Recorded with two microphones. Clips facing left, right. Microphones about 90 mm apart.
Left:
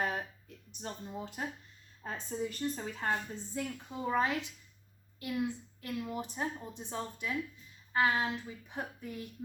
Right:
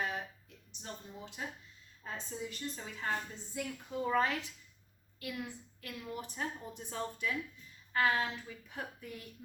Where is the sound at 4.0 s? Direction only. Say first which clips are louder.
Even; 15° left (ahead or behind).